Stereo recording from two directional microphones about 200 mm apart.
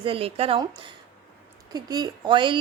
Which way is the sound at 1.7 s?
20° right (ahead or behind).